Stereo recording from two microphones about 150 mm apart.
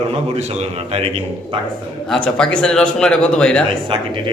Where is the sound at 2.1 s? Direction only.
5° left (ahead or behind).